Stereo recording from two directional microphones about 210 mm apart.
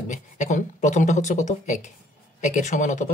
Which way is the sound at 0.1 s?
35° left (ahead or behind).